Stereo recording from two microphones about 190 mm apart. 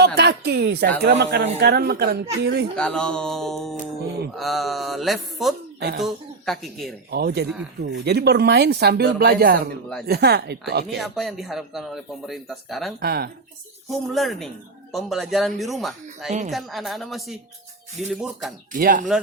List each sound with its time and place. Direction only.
0.2 s speech: 60° right (ahead or behind)
2.7 s speech: 5° left (ahead or behind)
7.1 s speech: 55° right (ahead or behind)
10.9 s speech: centre (ahead or behind)
13.0 s speech: 55° right (ahead or behind)
14.1 s speech: centre (ahead or behind)
18.7 s speech: 45° right (ahead or behind)